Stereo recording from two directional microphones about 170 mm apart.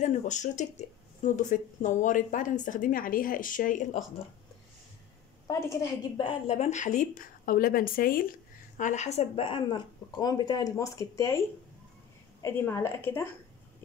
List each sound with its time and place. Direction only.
0.0 s speech: 45° left (ahead or behind)
5.5 s a woman's voice: 15° left (ahead or behind)
6.1 s a woman's voice: 35° left (ahead or behind); by 13.3 s 15° left (ahead or behind)